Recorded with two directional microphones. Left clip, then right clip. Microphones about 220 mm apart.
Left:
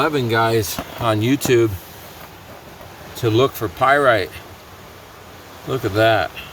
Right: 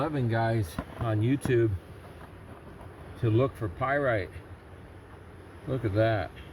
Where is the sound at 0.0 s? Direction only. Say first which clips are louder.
Left 12 dB; 10° left (ahead or behind).